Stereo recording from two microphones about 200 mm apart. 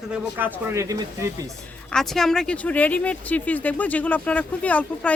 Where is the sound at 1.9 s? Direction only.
Centre (ahead or behind).